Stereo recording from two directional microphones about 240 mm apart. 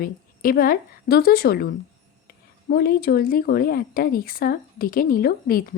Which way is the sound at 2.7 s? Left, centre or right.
Left.